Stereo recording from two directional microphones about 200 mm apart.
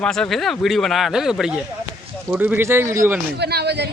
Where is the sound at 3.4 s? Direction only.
55° right (ahead or behind).